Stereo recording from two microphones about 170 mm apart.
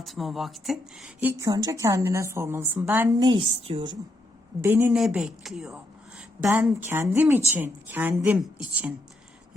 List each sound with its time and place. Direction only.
0.0 s speech: centre (ahead or behind)
3.2 s a woman's voice: 25° right (ahead or behind)
4.6 s speech: 15° right (ahead or behind)